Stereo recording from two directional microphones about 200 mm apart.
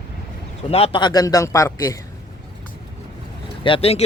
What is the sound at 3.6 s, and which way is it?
Speech, 30° left (ahead or behind).